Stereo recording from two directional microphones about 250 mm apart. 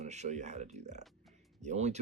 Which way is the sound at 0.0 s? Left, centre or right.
Right.